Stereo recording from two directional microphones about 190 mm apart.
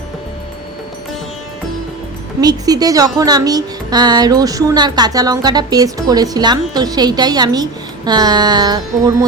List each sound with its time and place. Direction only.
2.4 s speech: 20° right (ahead or behind)